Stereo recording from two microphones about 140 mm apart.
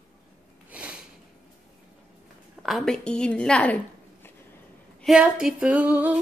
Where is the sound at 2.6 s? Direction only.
Centre (ahead or behind).